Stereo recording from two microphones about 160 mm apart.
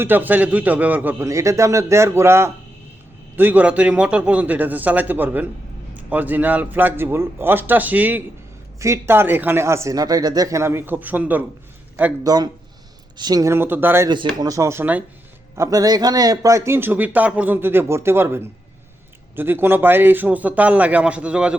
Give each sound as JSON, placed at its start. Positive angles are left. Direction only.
{"t": 0.0, "sound": "a man's voice", "side_deg": -10}
{"t": 12.2, "sound": "a man's voice", "side_deg": -25}